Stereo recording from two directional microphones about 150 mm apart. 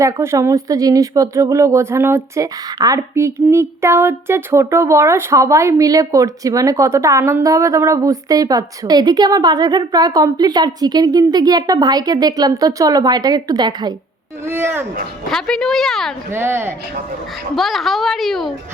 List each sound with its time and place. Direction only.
0.0 s speech: 20° right (ahead or behind)
14.4 s speech: 15° right (ahead or behind)
15.3 s a child's voice: 5° left (ahead or behind)
16.3 s speech: 15° right (ahead or behind)
17.5 s a child's voice: centre (ahead or behind)